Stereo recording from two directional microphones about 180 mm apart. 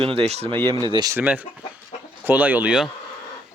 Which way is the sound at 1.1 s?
10° right (ahead or behind).